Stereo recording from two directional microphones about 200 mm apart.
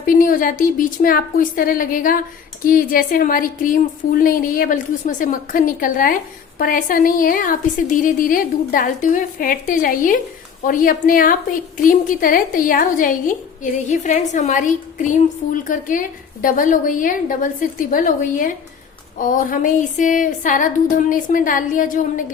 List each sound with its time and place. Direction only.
0.0 s a woman's voice: 45° left (ahead or behind)